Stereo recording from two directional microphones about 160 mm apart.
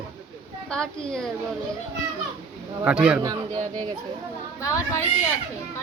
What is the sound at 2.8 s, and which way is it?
Speech, 5° right (ahead or behind).